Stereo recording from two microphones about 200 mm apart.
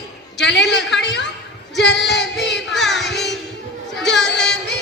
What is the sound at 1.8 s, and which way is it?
Female singing, 60° left (ahead or behind).